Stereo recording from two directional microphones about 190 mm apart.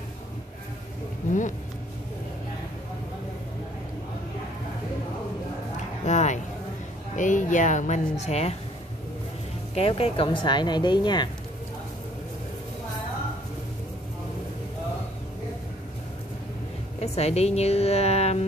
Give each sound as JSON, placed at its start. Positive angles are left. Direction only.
{"t": 6.0, "sound": "a sound", "side_deg": 40}
{"t": 7.2, "sound": "speech", "side_deg": 40}
{"t": 9.8, "sound": "speech", "side_deg": 30}
{"t": 17.0, "sound": "a woman's voice", "side_deg": 35}